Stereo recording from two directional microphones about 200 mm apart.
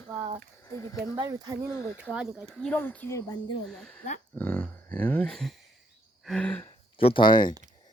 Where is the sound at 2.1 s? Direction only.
5° right (ahead or behind); by 3.3 s 15° left (ahead or behind).